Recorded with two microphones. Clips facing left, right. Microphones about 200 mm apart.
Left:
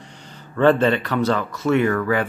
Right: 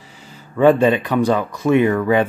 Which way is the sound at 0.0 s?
5° right (ahead or behind).